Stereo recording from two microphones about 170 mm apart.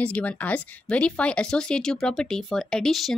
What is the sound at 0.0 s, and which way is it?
Speech, 10° left (ahead or behind).